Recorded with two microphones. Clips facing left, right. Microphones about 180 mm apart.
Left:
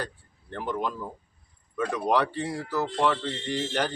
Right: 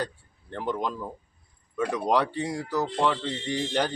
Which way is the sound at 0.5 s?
15° right (ahead or behind).